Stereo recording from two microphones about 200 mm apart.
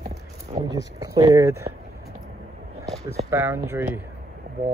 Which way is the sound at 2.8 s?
15° right (ahead or behind).